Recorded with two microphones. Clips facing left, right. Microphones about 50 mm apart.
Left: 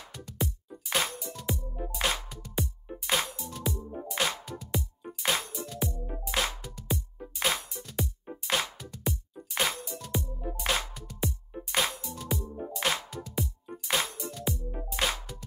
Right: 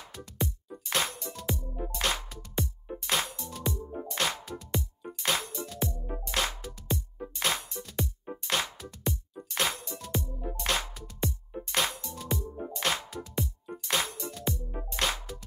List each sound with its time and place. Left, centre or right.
0.1 s music: centre
5.8 s music: centre
6.2 s music: centre